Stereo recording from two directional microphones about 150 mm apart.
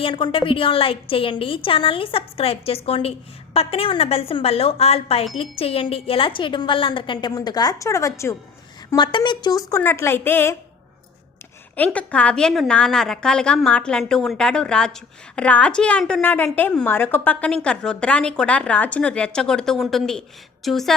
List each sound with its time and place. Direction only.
0.0 s a woman's voice: 35° left (ahead or behind)
9.0 s a woman's voice: 30° left (ahead or behind); by 10.6 s 15° left (ahead or behind)
11.8 s a woman's voice: 10° left (ahead or behind)